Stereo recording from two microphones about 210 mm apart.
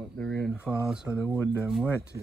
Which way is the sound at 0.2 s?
10° left (ahead or behind).